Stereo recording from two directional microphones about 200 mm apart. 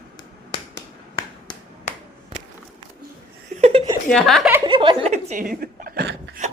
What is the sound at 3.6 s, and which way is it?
Chuckle, 30° right (ahead or behind).